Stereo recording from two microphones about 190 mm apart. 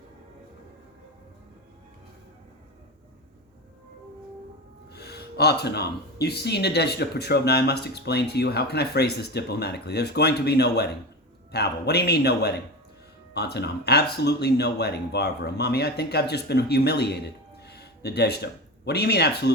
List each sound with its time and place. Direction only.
4.9 s speech: 60° left (ahead or behind)
17.6 s a sound: 60° left (ahead or behind)
18.9 s speech: 60° left (ahead or behind)